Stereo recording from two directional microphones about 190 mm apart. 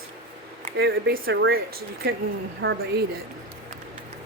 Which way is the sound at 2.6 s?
85° right.